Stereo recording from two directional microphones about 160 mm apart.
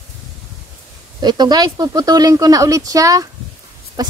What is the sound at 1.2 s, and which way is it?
A woman's voice, 25° right (ahead or behind).